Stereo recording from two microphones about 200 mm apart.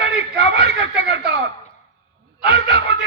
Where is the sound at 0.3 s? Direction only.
60° right (ahead or behind).